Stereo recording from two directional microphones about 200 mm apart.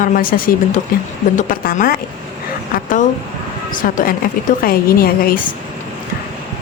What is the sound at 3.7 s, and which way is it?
A woman's voice, 45° left (ahead or behind).